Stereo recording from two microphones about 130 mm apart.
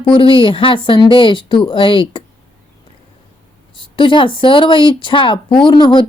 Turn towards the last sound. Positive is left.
turn(degrees=35)  # may be behind; listen again after turning